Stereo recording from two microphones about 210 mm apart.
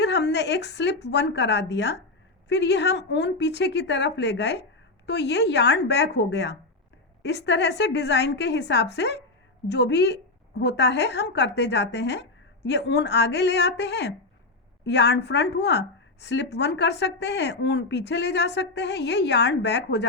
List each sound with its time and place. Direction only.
0.0 s a woman's voice: 55° left (ahead or behind)